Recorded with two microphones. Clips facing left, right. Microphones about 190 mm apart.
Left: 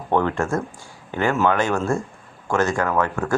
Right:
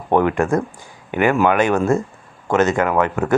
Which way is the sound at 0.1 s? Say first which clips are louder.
Right 5 dB; 15° right (ahead or behind).